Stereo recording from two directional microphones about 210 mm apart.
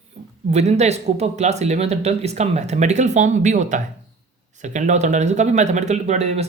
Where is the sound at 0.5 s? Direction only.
30° right (ahead or behind).